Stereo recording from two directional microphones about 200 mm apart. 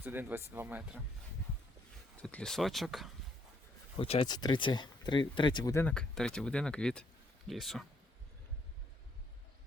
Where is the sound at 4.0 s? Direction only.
30° left (ahead or behind); by 7.8 s centre (ahead or behind).